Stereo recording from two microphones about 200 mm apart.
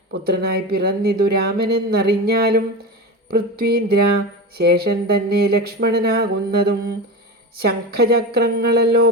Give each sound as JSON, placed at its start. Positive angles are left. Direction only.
{"t": 0.1, "sound": "speech", "side_deg": -50}